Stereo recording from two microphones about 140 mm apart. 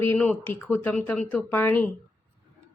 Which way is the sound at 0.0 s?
10° left (ahead or behind).